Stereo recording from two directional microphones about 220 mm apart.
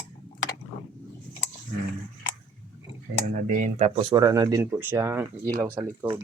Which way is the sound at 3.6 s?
30° right (ahead or behind).